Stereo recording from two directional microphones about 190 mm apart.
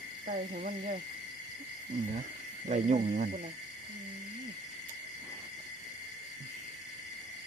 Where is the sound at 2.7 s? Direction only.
40° right (ahead or behind).